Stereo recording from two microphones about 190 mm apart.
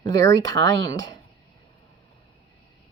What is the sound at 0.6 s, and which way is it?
Speech, 70° right (ahead or behind).